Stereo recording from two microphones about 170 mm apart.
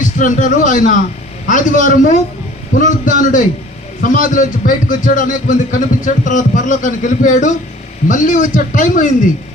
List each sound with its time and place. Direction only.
0.0 s a man's voice: 50° left (ahead or behind)